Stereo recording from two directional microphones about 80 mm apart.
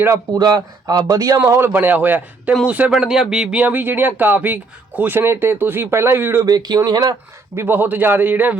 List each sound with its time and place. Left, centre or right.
0.3 s speech: right
1.5 s a man's voice: right
3.0 s a man's voice: centre; by 6.4 s right
6.4 s speech: right
7.5 s a man's voice: right